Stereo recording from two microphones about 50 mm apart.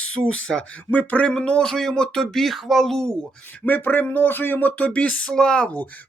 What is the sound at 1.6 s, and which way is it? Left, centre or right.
Speech, centre.